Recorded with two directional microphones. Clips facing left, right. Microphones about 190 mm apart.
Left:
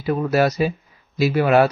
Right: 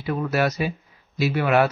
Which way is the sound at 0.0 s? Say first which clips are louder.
Left 4 dB; 35° left (ahead or behind).